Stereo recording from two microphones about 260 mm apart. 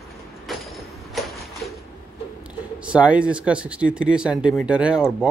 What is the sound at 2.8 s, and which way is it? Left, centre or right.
Speech, centre.